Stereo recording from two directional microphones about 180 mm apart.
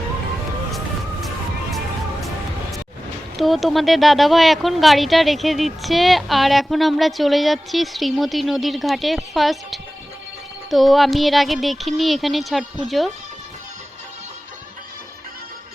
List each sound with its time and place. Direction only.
3.3 s speech: centre (ahead or behind)